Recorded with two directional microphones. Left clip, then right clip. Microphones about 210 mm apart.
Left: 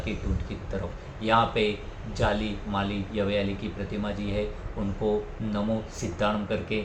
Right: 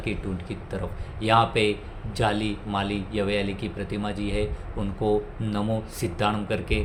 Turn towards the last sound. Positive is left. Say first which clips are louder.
# right 1 dB
turn(degrees=-50)  # may be behind; listen again after turning